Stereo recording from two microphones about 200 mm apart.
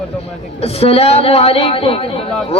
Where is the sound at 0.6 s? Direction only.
30° left (ahead or behind).